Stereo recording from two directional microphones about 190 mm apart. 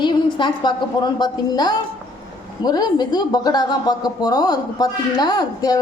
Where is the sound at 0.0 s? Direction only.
25° left (ahead or behind).